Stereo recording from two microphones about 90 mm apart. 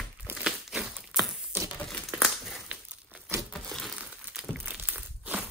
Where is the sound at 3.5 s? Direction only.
5° left (ahead or behind).